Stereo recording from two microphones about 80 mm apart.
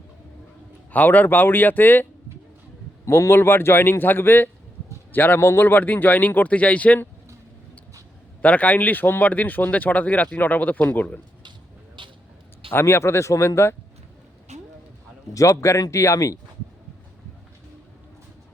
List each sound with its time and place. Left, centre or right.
0.9 s a man's voice: left
3.1 s a man's voice: left; by 7.1 s centre
8.4 s a man's voice: centre
12.0 s vehicle: right
12.7 s speech: left
15.3 s speech: left